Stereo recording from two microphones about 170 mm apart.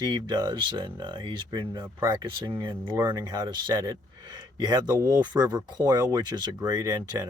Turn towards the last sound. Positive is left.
turn(degrees=-20)  # may be behind; listen again after turning